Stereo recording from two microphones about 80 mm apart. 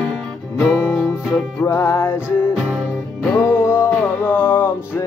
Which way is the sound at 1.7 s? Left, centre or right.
Left.